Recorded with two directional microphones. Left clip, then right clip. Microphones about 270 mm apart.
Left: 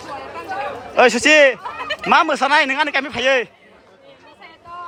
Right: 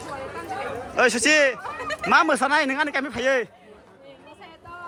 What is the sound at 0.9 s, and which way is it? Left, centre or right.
A man's voice, centre.